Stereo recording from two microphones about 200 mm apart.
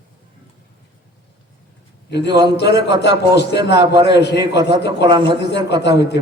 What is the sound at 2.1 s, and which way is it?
A man's voice, 60° left (ahead or behind).